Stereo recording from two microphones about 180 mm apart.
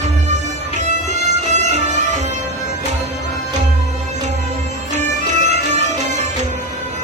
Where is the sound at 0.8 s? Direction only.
40° right (ahead or behind).